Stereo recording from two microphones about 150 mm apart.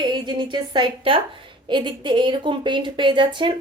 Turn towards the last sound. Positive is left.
turn(degrees=-35)  # may be behind; listen again after turning